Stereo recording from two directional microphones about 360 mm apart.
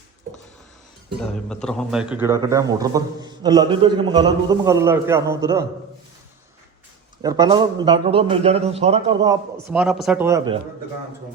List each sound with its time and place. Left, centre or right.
1.2 s a man's voice: centre
7.2 s a man's voice: centre